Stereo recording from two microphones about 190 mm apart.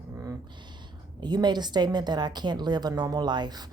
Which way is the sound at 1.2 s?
20° right (ahead or behind).